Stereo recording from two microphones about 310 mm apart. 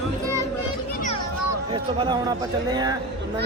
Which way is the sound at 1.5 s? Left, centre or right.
Centre.